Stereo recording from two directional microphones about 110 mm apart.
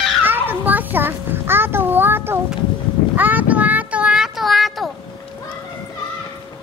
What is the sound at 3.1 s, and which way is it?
Child singing, 15° right (ahead or behind).